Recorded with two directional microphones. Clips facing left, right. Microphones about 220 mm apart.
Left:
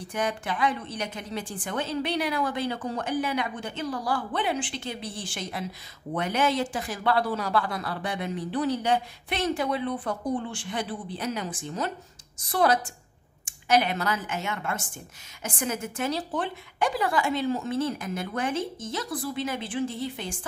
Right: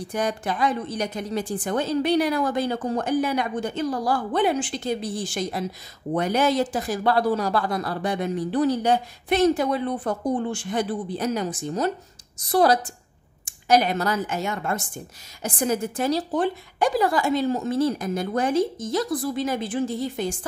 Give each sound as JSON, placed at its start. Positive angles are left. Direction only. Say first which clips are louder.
{"t": 0.1, "sound": "speech", "louder": "right 3 dB", "side_deg": -40}